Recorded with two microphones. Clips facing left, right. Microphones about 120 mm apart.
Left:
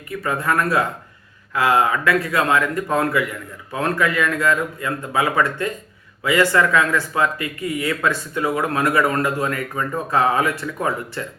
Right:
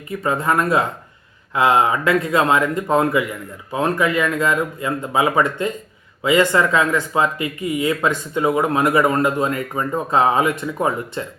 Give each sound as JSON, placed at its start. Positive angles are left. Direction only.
{"t": 0.1, "sound": "speech", "side_deg": -25}